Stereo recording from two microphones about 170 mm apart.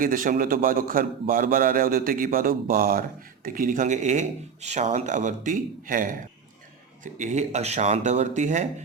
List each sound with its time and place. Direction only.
0.0 s a man's voice: 50° right (ahead or behind)